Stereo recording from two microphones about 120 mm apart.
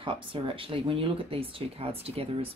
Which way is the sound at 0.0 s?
50° right (ahead or behind).